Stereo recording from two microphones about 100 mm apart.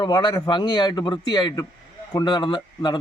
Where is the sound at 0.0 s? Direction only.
50° left (ahead or behind).